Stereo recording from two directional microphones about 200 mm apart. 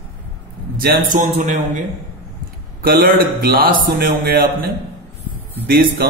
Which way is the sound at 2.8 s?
45° right (ahead or behind).